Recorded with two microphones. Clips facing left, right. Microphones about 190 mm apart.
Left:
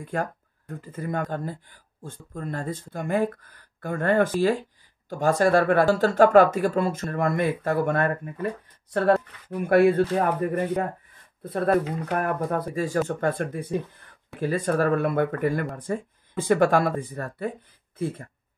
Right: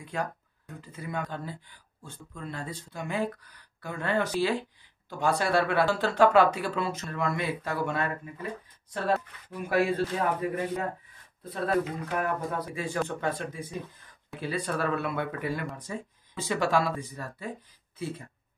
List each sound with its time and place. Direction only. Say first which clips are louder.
0.0 s speech: left 4 dB; 50° left (ahead or behind)
13.2 s speech: left 6 dB; 55° left (ahead or behind)